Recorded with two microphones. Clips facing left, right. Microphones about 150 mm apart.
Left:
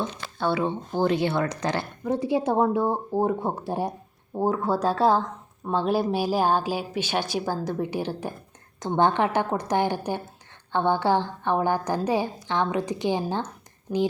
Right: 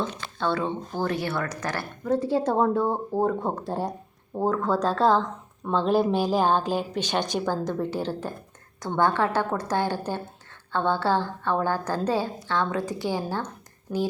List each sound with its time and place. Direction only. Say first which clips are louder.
0.0 s speech: left 1 dB; 10° left (ahead or behind)
13.9 s speech: left 2 dB; 10° left (ahead or behind)